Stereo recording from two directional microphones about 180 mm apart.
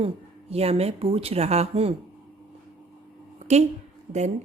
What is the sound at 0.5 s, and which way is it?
Speech, 35° right (ahead or behind).